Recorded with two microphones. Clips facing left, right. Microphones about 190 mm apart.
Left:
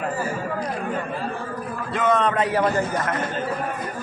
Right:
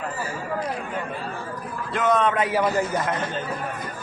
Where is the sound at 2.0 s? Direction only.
Centre (ahead or behind).